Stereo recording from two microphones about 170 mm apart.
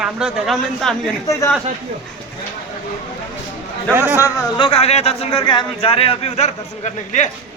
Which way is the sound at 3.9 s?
15° right (ahead or behind).